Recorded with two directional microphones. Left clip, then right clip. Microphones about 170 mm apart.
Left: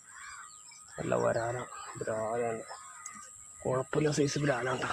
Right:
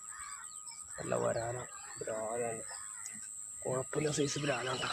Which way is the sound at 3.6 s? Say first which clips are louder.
Left 5 dB; 50° left (ahead or behind).